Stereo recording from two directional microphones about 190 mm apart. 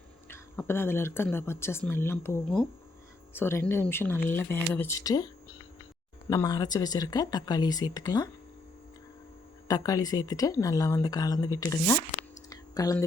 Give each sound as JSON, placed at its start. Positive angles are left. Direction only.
{"t": 0.3, "sound": "a woman's voice", "side_deg": 10}
{"t": 9.6, "sound": "a woman's voice", "side_deg": 20}
{"t": 12.5, "sound": "clicking", "side_deg": 20}